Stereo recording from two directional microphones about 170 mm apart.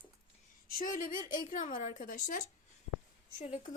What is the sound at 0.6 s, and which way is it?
Speech, 55° left (ahead or behind).